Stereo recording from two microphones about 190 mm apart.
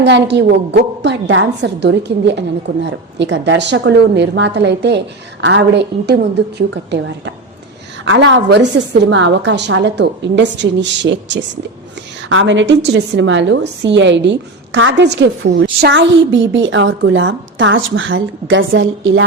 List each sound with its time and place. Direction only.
0.0 s a woman's voice: 65° right (ahead or behind)
12.3 s a woman's voice: 80° right